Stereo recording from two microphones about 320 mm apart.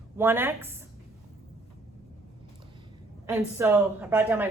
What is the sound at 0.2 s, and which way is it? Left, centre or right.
Speech, centre.